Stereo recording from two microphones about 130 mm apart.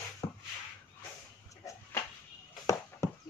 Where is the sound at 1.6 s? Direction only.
25° left (ahead or behind).